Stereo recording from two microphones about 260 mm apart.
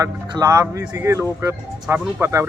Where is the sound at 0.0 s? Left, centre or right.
Centre.